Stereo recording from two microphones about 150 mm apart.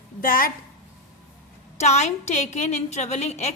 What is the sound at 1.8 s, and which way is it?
A woman's voice, 50° left (ahead or behind).